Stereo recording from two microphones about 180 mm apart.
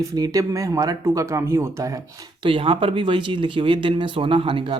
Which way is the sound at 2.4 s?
30° right (ahead or behind).